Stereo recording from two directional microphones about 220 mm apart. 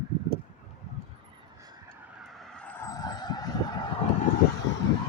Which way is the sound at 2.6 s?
10° left (ahead or behind).